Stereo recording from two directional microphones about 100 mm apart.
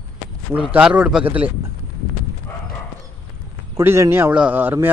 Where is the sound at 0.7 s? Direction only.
10° right (ahead or behind).